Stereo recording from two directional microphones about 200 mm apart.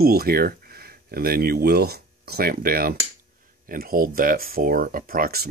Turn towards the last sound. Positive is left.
turn(degrees=-45)  # may be behind; listen again after turning